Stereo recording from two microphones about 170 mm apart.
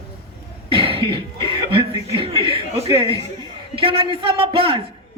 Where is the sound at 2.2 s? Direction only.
35° right (ahead or behind).